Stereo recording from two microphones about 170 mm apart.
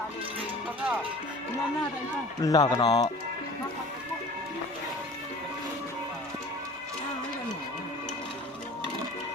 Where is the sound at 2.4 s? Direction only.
20° left (ahead or behind).